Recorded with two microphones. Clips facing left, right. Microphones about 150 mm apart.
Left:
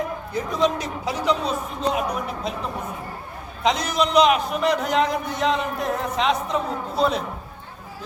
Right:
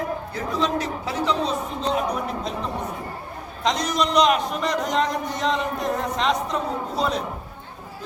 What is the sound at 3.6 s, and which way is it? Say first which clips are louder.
A man's voice: left 1 dB; 5° left (ahead or behind).